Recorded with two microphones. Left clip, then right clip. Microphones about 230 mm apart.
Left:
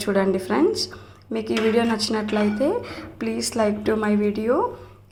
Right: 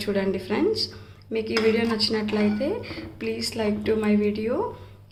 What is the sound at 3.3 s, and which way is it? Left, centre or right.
Speech, left.